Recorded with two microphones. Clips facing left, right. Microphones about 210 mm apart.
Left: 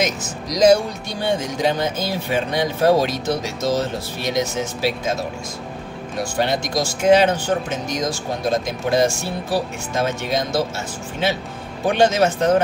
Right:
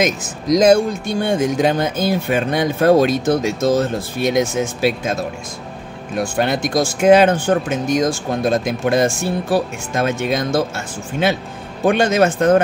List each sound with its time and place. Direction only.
0.0 s speech: 55° right (ahead or behind)
6.1 s speech: 55° right (ahead or behind)
11.8 s speech: 55° right (ahead or behind)